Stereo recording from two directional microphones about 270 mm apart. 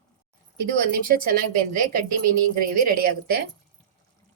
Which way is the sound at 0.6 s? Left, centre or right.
Right.